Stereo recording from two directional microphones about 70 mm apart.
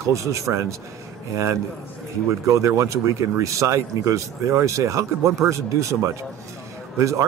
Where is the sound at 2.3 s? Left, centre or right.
Right.